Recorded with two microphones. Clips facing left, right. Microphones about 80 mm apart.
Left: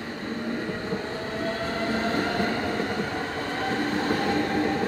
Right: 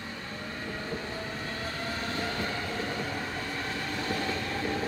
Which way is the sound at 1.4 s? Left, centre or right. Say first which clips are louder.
Left 11 dB; left.